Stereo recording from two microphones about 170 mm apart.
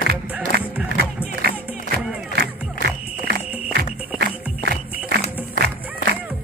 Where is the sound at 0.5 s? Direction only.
70° right (ahead or behind).